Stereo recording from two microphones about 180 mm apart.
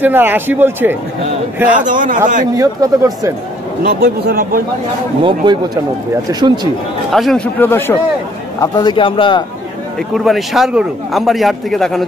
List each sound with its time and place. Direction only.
0.0 s speech: 10° right (ahead or behind)
1.7 s speech: 45° right (ahead or behind)
2.5 s speech: 20° right (ahead or behind)
3.8 s speech: 60° right (ahead or behind)
5.2 s speech: 25° right (ahead or behind)
7.1 s a man's voice: centre (ahead or behind)
7.6 s a man's voice: 10° left (ahead or behind)
8.5 s speech: 25° left (ahead or behind)
9.9 s a man's voice: centre (ahead or behind)